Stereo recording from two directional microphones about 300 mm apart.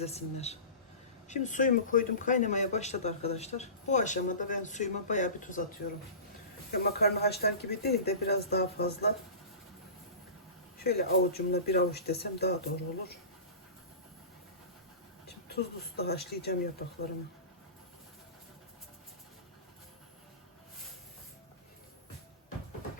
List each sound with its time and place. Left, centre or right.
0.0 s speech: left
6.7 s speech: left
10.8 s speech: left
15.3 s speech: left